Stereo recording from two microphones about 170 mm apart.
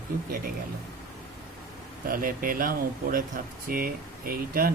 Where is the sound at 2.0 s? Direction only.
55° right (ahead or behind).